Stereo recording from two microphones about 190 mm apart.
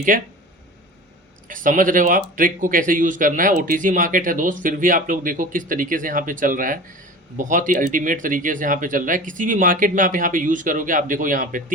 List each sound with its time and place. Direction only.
0.1 s speech: 45° right (ahead or behind)
1.5 s speech: 45° right (ahead or behind)